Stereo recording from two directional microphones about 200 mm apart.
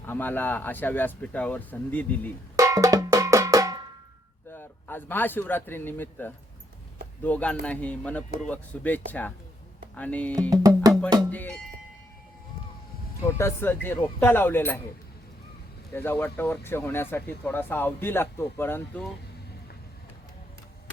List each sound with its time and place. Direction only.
0.0 s speech: 10° left (ahead or behind)
2.6 s music: 15° right (ahead or behind)
4.4 s a man's voice: 10° left (ahead or behind)
10.5 s music: 20° right (ahead or behind)
11.3 s speech: 10° left (ahead or behind)
13.2 s speech: 15° left (ahead or behind)
16.0 s speech: 10° left (ahead or behind)